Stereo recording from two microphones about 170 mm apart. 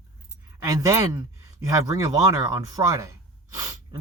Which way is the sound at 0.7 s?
20° right (ahead or behind).